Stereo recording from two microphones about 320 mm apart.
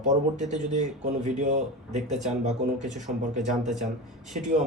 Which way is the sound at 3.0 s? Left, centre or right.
Right.